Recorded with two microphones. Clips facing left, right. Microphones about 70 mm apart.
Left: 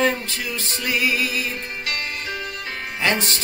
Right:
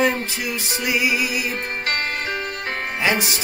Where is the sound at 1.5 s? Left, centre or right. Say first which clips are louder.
Right 4 dB; right.